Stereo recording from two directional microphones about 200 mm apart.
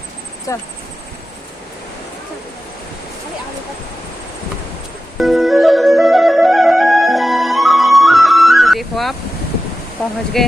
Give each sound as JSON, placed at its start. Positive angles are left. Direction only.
{"t": 0.5, "sound": "speech", "side_deg": 15}
{"t": 5.2, "sound": "flute", "side_deg": 0}
{"t": 10.4, "sound": "speech", "side_deg": 0}